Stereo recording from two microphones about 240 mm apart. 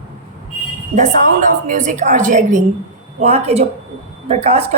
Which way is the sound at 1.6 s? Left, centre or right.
Right.